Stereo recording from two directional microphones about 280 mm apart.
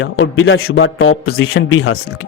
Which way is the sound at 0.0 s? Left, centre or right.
Left.